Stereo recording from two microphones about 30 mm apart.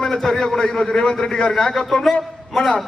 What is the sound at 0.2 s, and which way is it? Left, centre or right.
A man's voice, centre.